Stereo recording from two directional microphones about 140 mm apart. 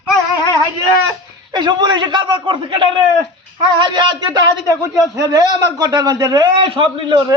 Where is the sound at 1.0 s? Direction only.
30° right (ahead or behind).